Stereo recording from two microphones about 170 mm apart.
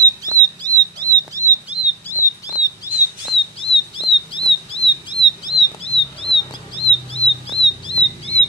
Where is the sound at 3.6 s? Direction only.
30° left (ahead or behind).